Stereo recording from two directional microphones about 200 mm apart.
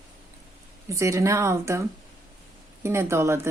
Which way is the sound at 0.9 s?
15° right (ahead or behind).